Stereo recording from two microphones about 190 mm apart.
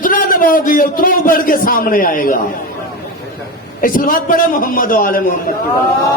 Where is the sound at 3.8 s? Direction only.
45° left (ahead or behind).